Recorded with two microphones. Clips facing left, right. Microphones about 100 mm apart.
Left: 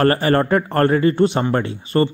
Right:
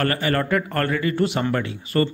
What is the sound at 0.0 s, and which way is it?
A man's voice, 35° left (ahead or behind).